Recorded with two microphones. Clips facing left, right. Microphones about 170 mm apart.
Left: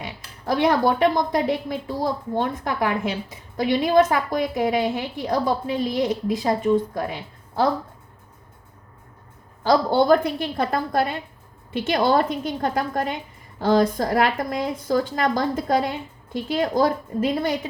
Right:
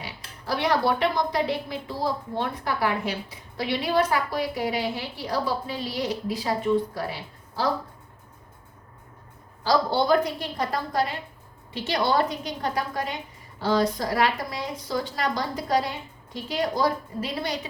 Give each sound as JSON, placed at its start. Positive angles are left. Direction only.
{"t": 0.4, "sound": "a woman's voice", "side_deg": 45}
{"t": 9.9, "sound": "a woman's voice", "side_deg": 50}